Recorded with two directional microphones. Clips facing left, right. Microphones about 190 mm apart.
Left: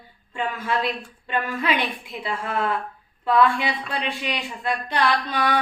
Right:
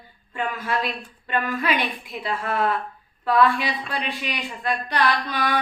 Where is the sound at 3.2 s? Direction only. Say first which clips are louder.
Even; 20° left (ahead or behind).